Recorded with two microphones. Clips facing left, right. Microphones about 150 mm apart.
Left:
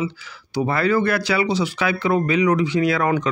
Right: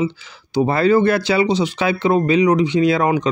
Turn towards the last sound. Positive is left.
turn(degrees=-20)  # may be behind; listen again after turning